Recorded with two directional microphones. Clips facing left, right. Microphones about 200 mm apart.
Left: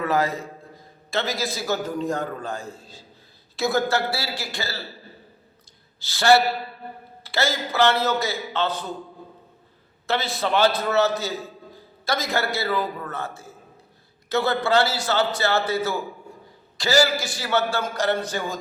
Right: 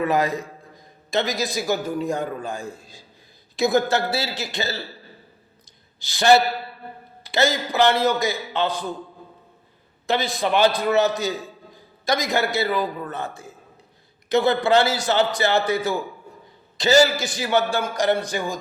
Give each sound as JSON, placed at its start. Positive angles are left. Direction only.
{"t": 0.0, "sound": "a man's voice", "side_deg": -15}
{"t": 6.0, "sound": "a man's voice", "side_deg": -15}
{"t": 10.1, "sound": "a man's voice", "side_deg": -15}